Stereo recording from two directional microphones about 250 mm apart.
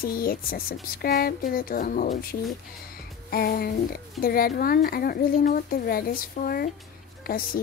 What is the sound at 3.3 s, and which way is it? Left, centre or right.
Speech, left.